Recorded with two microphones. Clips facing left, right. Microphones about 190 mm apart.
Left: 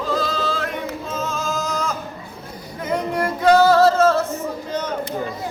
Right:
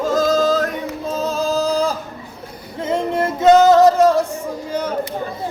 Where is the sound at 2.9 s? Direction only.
25° right (ahead or behind).